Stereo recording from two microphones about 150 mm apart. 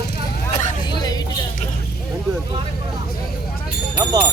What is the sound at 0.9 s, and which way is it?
Music, 25° left (ahead or behind).